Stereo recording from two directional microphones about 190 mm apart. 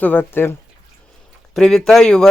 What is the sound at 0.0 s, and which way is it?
Speech, 10° left (ahead or behind).